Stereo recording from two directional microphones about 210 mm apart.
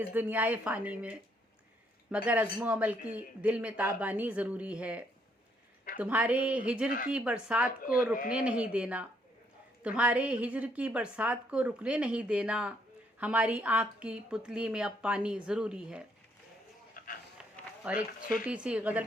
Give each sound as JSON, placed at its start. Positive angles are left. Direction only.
{"t": 0.1, "sound": "a woman's voice", "side_deg": -10}
{"t": 17.0, "sound": "a sound", "side_deg": 45}
{"t": 17.9, "sound": "a woman's voice", "side_deg": -5}